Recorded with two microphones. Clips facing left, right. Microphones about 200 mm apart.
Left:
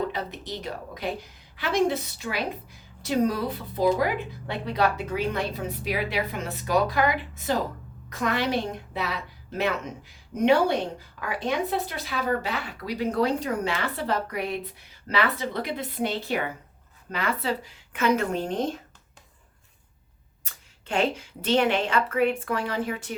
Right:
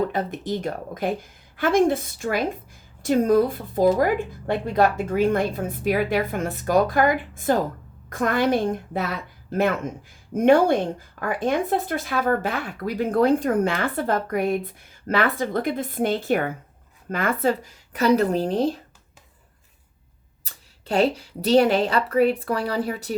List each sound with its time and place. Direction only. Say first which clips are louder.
0.1 s a woman's voice: right 7 dB; 50° right (ahead or behind); by 18.8 s 35° right (ahead or behind)
20.4 s speech: right 3 dB; 35° right (ahead or behind)